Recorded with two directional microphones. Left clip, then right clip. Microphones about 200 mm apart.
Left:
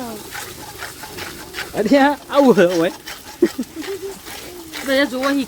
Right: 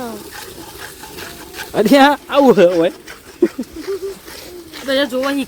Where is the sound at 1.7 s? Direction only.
35° right (ahead or behind).